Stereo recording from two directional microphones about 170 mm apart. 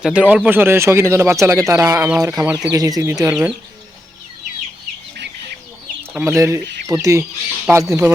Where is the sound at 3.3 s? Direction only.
5° right (ahead or behind).